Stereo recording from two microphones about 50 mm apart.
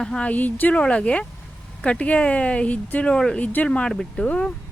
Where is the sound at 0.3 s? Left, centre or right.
Left.